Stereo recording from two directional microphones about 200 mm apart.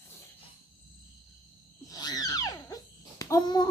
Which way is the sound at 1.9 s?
20° left (ahead or behind).